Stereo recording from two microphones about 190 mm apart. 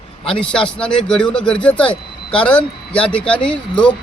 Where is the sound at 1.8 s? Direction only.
25° left (ahead or behind).